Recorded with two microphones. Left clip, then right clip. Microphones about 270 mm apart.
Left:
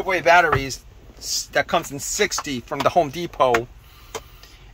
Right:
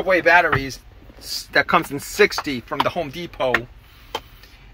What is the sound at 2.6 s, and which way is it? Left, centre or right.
Speech, centre.